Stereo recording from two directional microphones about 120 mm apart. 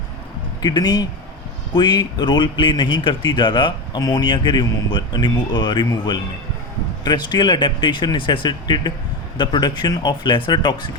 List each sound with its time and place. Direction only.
0.6 s speech: 35° left (ahead or behind)